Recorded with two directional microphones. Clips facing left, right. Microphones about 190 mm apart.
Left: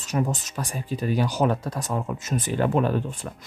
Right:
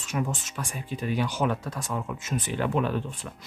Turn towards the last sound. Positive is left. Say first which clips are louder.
# left 4 dB
turn(degrees=40)  # may be behind; listen again after turning